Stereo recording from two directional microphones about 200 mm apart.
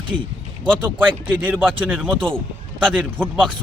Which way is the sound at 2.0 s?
5° left (ahead or behind).